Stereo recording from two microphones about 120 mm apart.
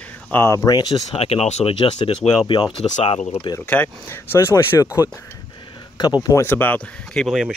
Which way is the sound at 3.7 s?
15° left (ahead or behind).